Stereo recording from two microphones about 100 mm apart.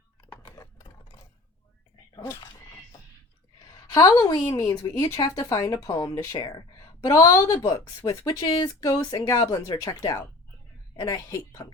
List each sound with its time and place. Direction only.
2.1 s neigh: 45° left (ahead or behind)
3.9 s speech: 35° left (ahead or behind)
8.3 s speech: 60° left (ahead or behind)
8.6 s speech: 40° left (ahead or behind)